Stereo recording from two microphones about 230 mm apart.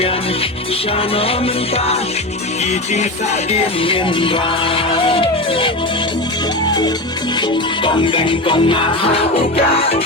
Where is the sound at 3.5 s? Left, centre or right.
Left.